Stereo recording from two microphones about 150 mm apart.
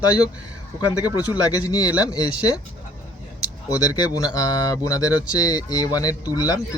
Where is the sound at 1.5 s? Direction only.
25° left (ahead or behind).